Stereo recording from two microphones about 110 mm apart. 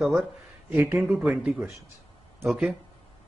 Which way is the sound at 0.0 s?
5° right (ahead or behind).